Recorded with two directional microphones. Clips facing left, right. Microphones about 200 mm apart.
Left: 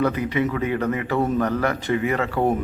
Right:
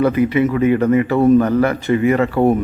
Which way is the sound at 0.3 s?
5° right (ahead or behind).